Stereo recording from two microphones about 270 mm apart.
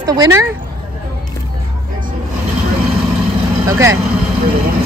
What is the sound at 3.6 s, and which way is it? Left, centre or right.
Speech, centre.